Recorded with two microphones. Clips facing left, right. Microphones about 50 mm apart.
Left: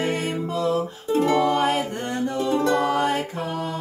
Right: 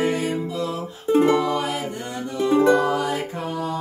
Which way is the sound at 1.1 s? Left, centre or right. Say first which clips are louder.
Right 3 dB; right.